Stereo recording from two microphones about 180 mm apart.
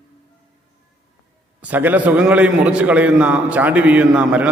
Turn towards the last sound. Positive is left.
turn(degrees=-5)  # may be behind; listen again after turning